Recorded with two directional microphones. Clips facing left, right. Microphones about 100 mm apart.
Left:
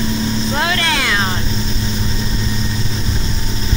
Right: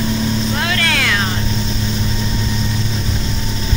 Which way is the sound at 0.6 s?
15° left (ahead or behind).